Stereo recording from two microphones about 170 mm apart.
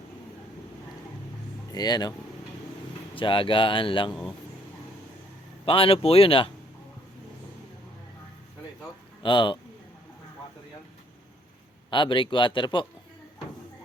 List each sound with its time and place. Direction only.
1.7 s speech: 25° left (ahead or behind)
3.2 s speech: 30° left (ahead or behind)
5.6 s speech: 30° left (ahead or behind)
9.2 s speech: 30° left (ahead or behind)
11.9 s speech: 30° left (ahead or behind)